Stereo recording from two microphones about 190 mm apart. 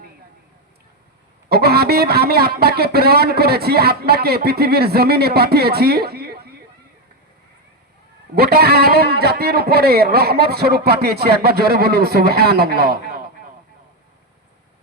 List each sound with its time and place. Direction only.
1.5 s speech: 55° right (ahead or behind)
8.4 s speech: 55° right (ahead or behind)